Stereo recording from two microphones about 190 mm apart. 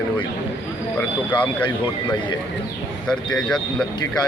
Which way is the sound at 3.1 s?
5° left (ahead or behind).